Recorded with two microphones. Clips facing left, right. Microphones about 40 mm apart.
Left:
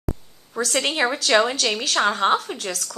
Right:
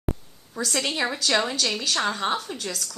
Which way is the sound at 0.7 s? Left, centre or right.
Left.